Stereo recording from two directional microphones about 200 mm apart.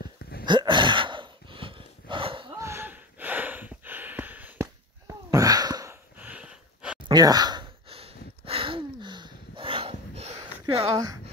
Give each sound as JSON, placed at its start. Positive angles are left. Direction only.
{"t": 0.5, "sound": "gasp", "side_deg": -25}
{"t": 2.6, "sound": "a sound", "side_deg": -10}
{"t": 7.1, "sound": "sigh", "side_deg": -20}